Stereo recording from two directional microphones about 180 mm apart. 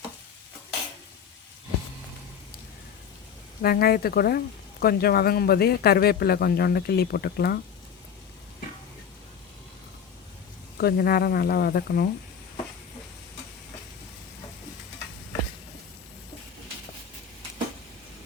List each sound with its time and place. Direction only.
3.6 s speech: 60° left (ahead or behind)
10.8 s speech: 60° left (ahead or behind)